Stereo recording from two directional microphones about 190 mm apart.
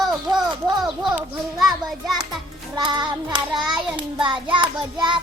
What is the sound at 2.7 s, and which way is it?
Child singing, 25° right (ahead or behind).